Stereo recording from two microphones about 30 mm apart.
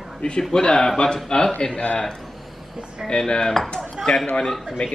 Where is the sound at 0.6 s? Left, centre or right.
Left.